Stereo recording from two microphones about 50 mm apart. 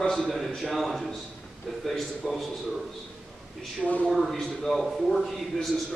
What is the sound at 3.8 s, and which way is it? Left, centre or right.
Speech, left.